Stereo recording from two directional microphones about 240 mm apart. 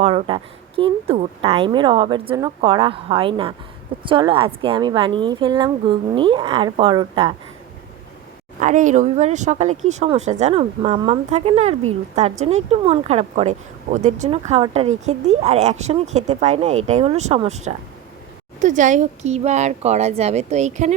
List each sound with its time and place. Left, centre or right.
0.0 s speech: right
8.5 s speech: right